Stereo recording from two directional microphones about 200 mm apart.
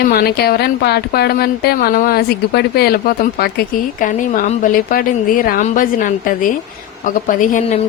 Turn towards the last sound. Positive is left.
turn(degrees=40)  # may be behind; listen again after turning